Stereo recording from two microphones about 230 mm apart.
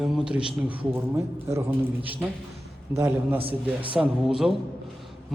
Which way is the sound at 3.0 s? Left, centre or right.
Centre.